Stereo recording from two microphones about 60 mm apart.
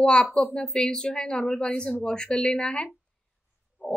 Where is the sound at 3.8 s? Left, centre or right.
Right.